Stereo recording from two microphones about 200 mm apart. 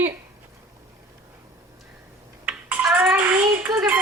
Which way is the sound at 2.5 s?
10° right (ahead or behind).